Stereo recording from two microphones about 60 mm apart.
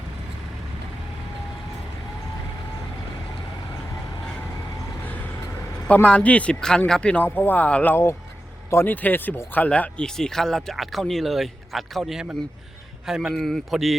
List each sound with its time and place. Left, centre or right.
5.9 s speech: left
6.6 s speech: centre
7.3 s speech: left
9.6 s speech: centre
10.1 s speech: centre
13.3 s speech: centre